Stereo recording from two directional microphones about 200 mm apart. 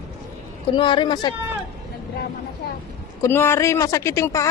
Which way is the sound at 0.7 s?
25° left (ahead or behind).